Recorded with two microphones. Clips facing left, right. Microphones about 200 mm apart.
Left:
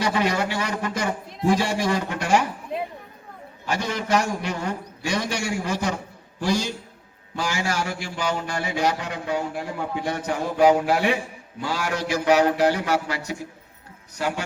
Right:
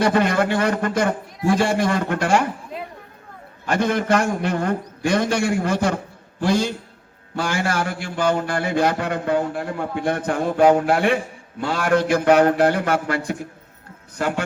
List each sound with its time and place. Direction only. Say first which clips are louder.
0.0 s a man's voice: right 5 dB; 55° right (ahead or behind)
3.7 s a man's voice: right 5 dB; 55° right (ahead or behind)